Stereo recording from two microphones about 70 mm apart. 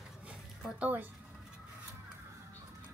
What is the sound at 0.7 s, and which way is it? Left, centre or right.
Speech, right.